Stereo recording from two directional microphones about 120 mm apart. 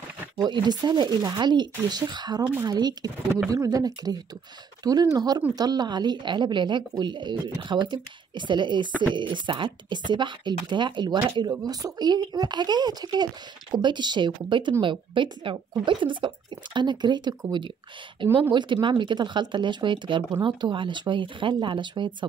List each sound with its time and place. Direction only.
0.4 s speech: 35° right (ahead or behind)